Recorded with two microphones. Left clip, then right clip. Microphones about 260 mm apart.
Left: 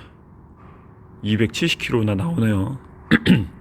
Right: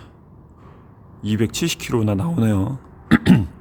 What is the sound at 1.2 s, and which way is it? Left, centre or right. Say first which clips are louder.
Speech: left 1 dB; centre.